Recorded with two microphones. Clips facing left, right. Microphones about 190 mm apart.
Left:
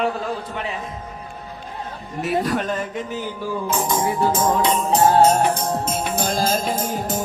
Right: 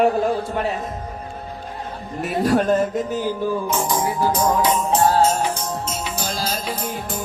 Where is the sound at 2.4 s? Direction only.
45° right (ahead or behind).